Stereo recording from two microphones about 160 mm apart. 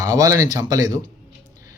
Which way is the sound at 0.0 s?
20° right (ahead or behind).